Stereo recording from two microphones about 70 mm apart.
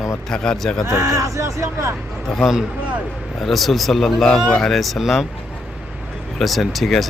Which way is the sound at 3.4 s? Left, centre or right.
Centre.